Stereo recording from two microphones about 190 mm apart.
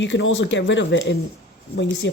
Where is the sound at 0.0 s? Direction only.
75° left (ahead or behind).